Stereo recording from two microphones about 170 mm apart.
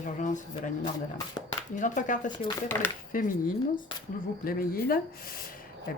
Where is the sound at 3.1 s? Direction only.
55° left (ahead or behind).